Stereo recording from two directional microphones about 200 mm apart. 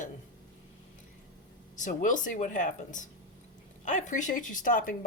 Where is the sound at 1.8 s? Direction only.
40° left (ahead or behind).